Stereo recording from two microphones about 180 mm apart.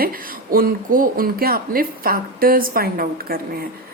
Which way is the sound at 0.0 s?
55° right (ahead or behind).